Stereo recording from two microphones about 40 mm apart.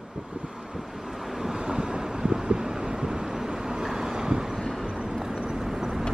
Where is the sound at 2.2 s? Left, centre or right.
Centre.